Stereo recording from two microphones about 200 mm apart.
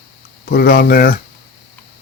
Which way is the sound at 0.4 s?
50° left (ahead or behind).